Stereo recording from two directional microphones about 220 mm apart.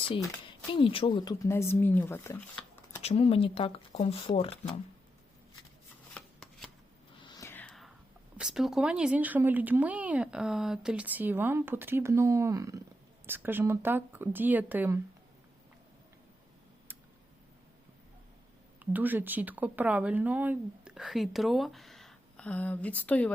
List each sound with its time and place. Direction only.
0.7 s speech: 25° left (ahead or behind)
3.0 s speech: 30° left (ahead or behind)
6.1 s shuffling cards: 5° left (ahead or behind)
7.2 s whispering: 20° left (ahead or behind)
8.4 s speech: centre (ahead or behind)
16.9 s tick: 10° right (ahead or behind)
18.8 s speech: 10° right (ahead or behind)